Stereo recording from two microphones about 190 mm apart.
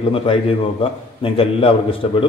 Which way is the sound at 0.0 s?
30° left (ahead or behind).